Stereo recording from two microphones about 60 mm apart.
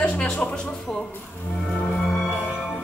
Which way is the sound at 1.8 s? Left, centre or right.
Centre.